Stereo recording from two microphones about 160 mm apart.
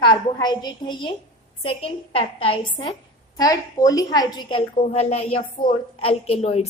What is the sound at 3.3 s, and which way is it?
A woman's voice, 20° left (ahead or behind).